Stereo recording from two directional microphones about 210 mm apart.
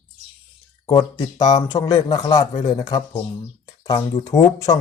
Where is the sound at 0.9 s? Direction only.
20° left (ahead or behind).